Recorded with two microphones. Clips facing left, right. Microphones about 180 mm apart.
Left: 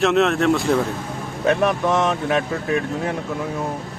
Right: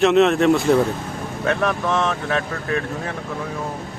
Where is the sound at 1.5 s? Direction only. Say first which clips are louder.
Left 3 dB; 15° left (ahead or behind).